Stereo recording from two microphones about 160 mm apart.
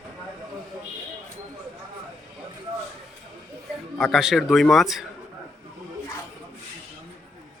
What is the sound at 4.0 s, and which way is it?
Speech, centre (ahead or behind).